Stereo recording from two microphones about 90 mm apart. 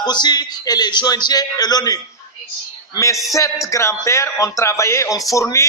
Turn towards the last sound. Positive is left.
turn(degrees=35)  # may be behind; listen again after turning